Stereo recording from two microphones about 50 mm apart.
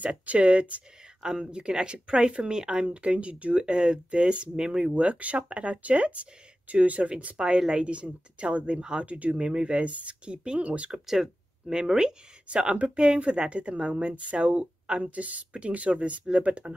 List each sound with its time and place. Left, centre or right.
0.0 s speech: right
1.2 s speech: centre
10.9 s speech: centre; by 16.7 s right